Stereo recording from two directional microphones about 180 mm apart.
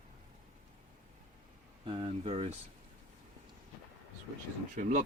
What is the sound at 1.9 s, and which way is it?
Speech, 30° right (ahead or behind).